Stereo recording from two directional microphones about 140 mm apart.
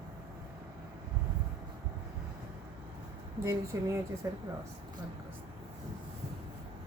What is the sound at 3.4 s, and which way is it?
Speech, 20° right (ahead or behind).